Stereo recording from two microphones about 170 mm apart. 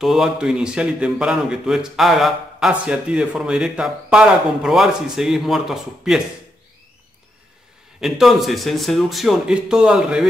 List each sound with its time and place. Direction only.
0.0 s a man's voice: centre (ahead or behind)
8.0 s a man's voice: centre (ahead or behind)